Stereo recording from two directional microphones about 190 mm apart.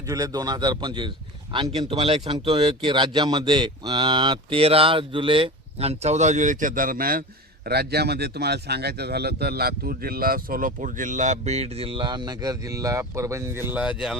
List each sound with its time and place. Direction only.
0.1 s a man's voice: 20° right (ahead or behind); by 14.2 s 5° right (ahead or behind)